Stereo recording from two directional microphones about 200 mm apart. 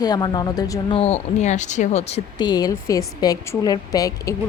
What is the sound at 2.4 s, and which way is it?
A woman's voice, 20° left (ahead or behind).